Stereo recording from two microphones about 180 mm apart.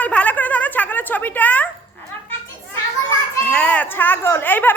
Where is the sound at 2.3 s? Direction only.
10° left (ahead or behind).